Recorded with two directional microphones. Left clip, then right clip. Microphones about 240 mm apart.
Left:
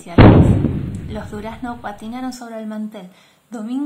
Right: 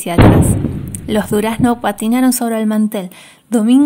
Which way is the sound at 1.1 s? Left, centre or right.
Right.